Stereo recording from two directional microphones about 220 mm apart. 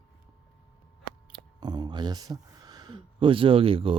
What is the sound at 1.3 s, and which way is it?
Speech, 20° right (ahead or behind).